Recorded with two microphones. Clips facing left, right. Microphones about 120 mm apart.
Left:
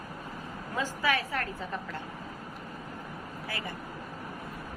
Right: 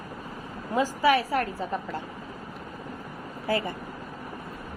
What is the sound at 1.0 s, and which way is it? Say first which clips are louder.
Speech: right 8 dB; 25° right (ahead or behind).